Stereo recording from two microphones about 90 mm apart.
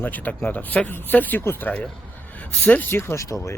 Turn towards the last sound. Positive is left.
turn(degrees=35)  # may be behind; listen again after turning